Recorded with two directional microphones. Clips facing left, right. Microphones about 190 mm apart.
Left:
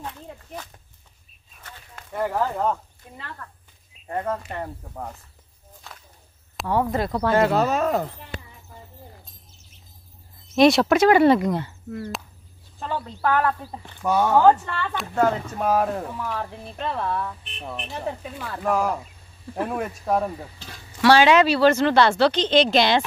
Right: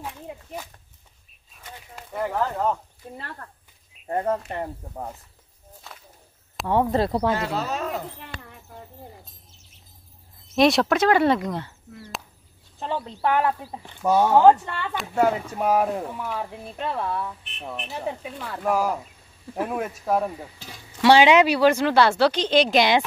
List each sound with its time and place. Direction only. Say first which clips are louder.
0.0 s a sound: right 1 dB; 10° right (ahead or behind)
2.2 s speech: left 1 dB; centre (ahead or behind)
3.4 s speech: left 1 dB; 35° right (ahead or behind)
6.7 s speech: right 2 dB; 25° right (ahead or behind)
7.3 s speech: left 8 dB; 55° left (ahead or behind)
8.2 s a sound: left 2 dB; 65° right (ahead or behind)
8.6 s bird: right 3 dB; centre (ahead or behind)
10.5 s speech: left 3 dB; centre (ahead or behind)
12.7 s speech: right 1 dB; 20° right (ahead or behind)
15.0 s speech: even; 10° right (ahead or behind)
21.0 s speech: even; 20° right (ahead or behind)